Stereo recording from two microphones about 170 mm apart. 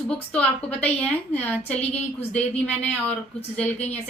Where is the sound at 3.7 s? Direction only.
40° left (ahead or behind).